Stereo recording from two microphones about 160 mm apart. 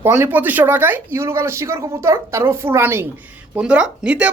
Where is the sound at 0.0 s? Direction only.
15° right (ahead or behind).